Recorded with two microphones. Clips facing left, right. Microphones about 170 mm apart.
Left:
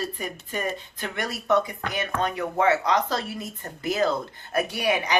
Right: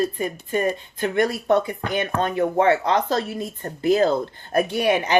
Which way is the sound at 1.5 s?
30° right (ahead or behind).